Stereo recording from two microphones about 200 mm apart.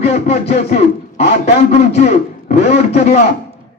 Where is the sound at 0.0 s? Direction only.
30° left (ahead or behind).